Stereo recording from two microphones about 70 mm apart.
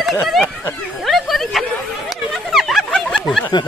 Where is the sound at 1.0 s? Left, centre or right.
Centre.